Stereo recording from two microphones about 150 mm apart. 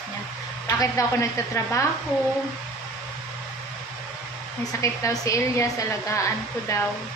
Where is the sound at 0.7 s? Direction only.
20° left (ahead or behind).